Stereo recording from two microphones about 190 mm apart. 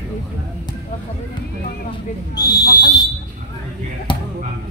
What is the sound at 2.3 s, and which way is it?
Speech, 20° left (ahead or behind).